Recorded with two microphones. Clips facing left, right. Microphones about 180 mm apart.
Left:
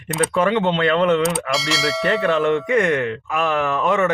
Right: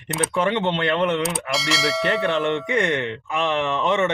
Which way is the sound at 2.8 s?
25° right (ahead or behind).